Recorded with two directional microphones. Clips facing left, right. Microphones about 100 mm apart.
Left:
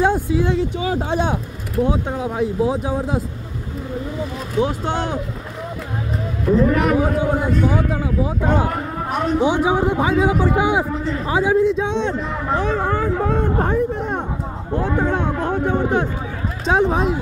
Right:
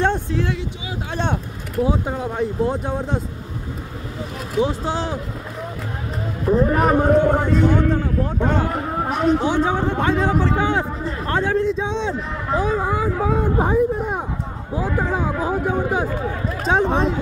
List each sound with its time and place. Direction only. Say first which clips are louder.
0.0 s a sound: left 3 dB; 10° left (ahead or behind)
0.6 s speech: left 9 dB; 45° left (ahead or behind)
1.1 s speech: left 3 dB; 5° left (ahead or behind)
4.6 s speech: left 1 dB; centre (ahead or behind)
6.4 s speech: left 1 dB; 30° right (ahead or behind)
7.6 s a man's voice: right 2 dB; 10° left (ahead or behind)